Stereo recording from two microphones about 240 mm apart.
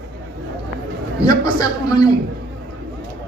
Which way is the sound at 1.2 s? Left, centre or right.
Centre.